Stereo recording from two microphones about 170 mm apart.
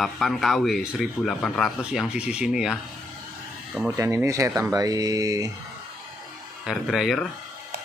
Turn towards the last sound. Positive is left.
turn(degrees=0)  # may be behind; listen again after turning